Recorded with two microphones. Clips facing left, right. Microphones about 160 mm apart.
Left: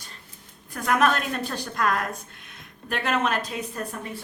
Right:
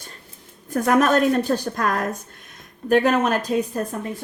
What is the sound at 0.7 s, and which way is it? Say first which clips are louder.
A woman's voice: right 5 dB; 45° right (ahead or behind).